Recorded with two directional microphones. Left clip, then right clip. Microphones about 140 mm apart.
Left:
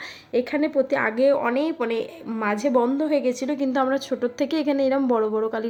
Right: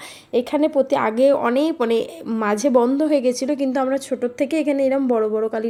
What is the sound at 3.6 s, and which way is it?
A woman's voice, 15° right (ahead or behind).